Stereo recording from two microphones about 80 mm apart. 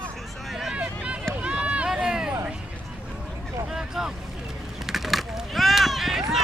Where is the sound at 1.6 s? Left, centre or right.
Centre.